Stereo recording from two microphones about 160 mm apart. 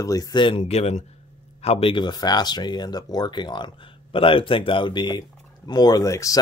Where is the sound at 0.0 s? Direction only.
20° left (ahead or behind).